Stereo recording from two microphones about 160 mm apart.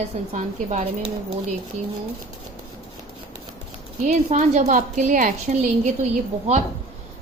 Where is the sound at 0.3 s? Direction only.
50° right (ahead or behind).